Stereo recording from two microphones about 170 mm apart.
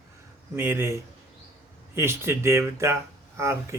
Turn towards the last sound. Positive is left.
turn(degrees=-15)  # may be behind; listen again after turning